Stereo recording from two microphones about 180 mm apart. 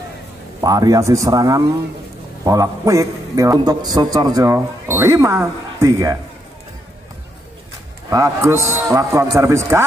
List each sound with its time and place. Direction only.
0.6 s a man's voice: 20° right (ahead or behind)
8.1 s a man's voice: 15° right (ahead or behind)